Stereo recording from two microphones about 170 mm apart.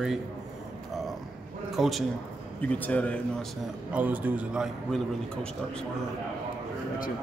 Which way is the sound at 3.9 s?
10° right (ahead or behind).